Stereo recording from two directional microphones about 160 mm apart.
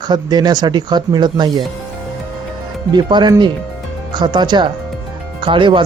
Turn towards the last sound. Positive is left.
turn(degrees=-30)  # may be behind; listen again after turning